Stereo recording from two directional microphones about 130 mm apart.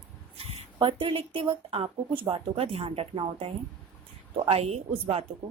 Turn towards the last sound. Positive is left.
turn(degrees=-50)  # may be behind; listen again after turning